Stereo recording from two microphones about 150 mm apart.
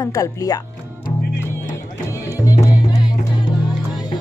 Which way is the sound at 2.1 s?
20° left (ahead or behind).